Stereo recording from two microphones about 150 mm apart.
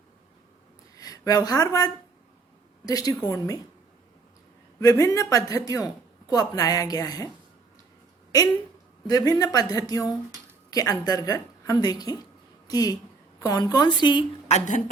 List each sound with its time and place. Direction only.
0.9 s a woman's voice: 25° left (ahead or behind)
4.8 s a woman's voice: 25° left (ahead or behind)
9.0 s a woman's voice: 25° left (ahead or behind)
14.4 s a woman's voice: 50° left (ahead or behind)